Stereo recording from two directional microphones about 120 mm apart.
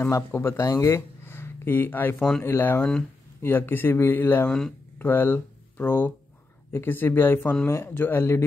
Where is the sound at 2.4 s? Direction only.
20° left (ahead or behind).